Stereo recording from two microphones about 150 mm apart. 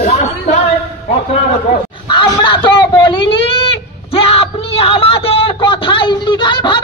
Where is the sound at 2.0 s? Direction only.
30° left (ahead or behind).